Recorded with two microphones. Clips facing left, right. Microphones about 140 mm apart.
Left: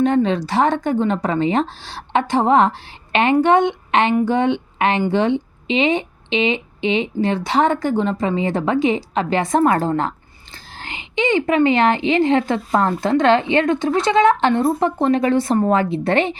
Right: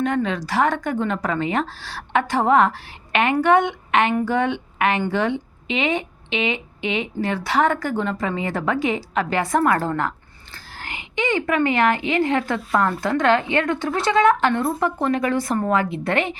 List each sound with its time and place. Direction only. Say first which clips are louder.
0.0 s speech: left 6 dB; 25° left (ahead or behind)